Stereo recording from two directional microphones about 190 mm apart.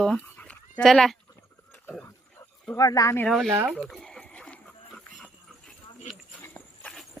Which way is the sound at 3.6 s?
Centre (ahead or behind).